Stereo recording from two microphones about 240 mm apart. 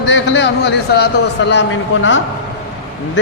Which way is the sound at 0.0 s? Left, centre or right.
Left.